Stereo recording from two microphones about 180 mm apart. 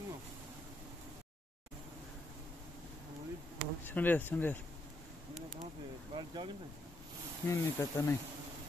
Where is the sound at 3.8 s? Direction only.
10° left (ahead or behind).